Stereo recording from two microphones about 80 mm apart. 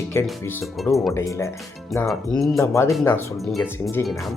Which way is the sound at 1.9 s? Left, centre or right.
Centre.